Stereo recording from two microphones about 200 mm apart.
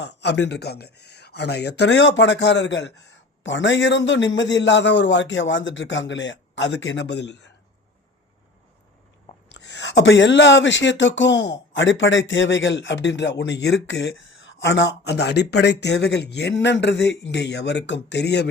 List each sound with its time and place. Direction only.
0.0 s speech: 60° left (ahead or behind)
9.6 s speech: 60° left (ahead or behind)